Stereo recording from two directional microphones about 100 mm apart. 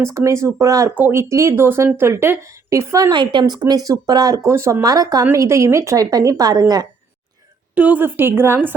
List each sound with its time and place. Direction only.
0.3 s a woman's voice: 30° right (ahead or behind)
0.9 s speech: 20° right (ahead or behind)
3.1 s a woman's voice: 50° right (ahead or behind)
4.4 s a woman's voice: 30° right (ahead or behind)
7.8 s speech: 15° right (ahead or behind)